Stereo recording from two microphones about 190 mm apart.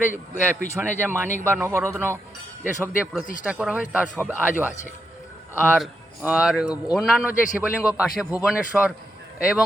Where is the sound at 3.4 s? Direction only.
5° right (ahead or behind).